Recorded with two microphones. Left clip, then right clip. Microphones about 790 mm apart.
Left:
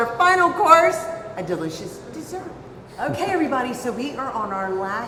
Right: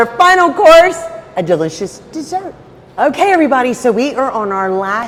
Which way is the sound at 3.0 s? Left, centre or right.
Right.